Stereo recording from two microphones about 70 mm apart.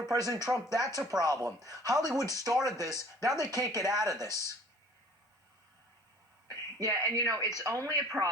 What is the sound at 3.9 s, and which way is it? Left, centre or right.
Speech, right.